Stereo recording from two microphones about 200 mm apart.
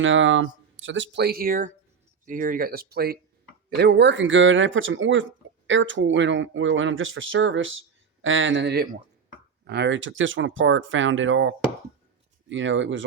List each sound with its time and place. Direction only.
0.0 s speech: 70° right (ahead or behind)